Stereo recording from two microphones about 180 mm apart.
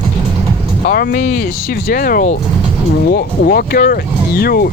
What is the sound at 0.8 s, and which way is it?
Speech, 55° left (ahead or behind).